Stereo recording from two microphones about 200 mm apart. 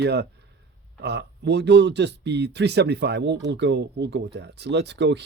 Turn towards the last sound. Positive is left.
turn(degrees=-60)  # may be behind; listen again after turning